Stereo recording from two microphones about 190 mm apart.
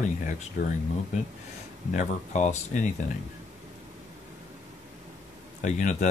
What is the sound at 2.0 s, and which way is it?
Speech, 40° left (ahead or behind).